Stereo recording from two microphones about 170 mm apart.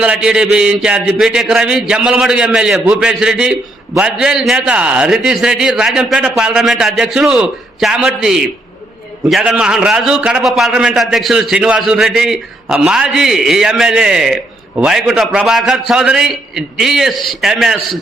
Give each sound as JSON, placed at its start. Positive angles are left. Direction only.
{"t": 0.0, "sound": "a man's voice", "side_deg": -5}